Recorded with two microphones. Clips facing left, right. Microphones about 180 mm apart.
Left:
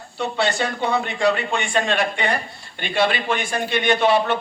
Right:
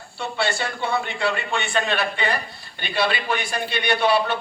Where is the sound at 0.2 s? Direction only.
20° left (ahead or behind).